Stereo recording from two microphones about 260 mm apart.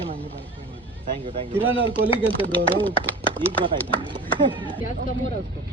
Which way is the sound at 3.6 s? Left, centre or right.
Centre.